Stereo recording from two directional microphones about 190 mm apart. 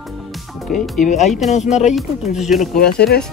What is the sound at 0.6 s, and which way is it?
Speech, centre (ahead or behind).